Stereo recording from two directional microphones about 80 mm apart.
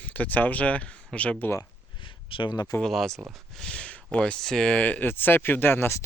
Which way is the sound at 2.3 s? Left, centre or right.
Left.